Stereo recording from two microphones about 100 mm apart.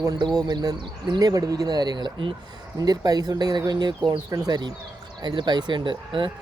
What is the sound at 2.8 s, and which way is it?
A man's voice, 40° right (ahead or behind).